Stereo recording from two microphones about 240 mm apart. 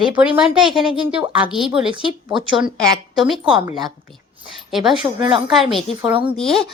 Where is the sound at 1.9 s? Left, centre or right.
Centre.